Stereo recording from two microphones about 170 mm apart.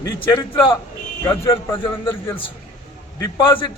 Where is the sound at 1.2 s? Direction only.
15° left (ahead or behind).